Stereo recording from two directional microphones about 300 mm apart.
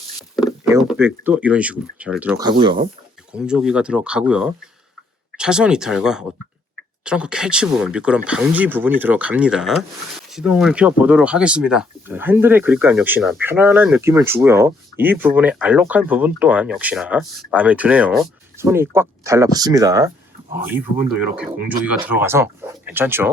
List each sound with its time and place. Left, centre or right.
0.3 s speech: centre
3.3 s speech: centre
21.2 s speech: centre